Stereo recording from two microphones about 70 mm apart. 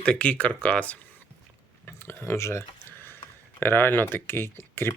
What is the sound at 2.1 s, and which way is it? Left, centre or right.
Speech, left.